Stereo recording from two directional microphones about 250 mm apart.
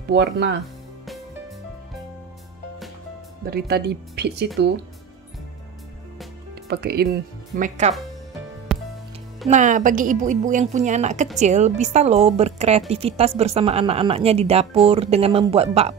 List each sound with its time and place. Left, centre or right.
0.1 s speech: right
3.4 s speech: right
6.7 s speech: right
8.7 s music: centre
9.5 s speech: right